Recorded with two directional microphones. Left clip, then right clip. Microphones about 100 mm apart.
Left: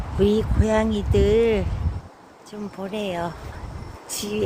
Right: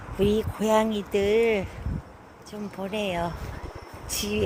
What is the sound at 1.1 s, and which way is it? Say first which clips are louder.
Speech: left 3 dB; 20° left (ahead or behind).